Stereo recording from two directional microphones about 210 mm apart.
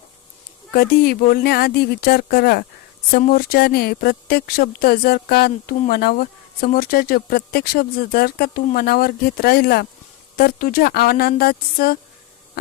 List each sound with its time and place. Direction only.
0.7 s speech: 45° left (ahead or behind)